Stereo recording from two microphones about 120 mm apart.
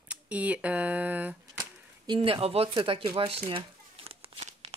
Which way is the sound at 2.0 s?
45° right (ahead or behind).